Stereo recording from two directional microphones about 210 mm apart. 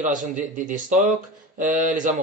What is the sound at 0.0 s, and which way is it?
Speech, 35° right (ahead or behind).